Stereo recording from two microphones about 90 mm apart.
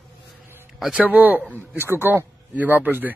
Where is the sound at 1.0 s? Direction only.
20° right (ahead or behind).